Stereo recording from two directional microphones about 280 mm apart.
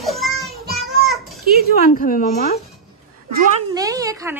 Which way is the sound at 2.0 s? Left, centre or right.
Left.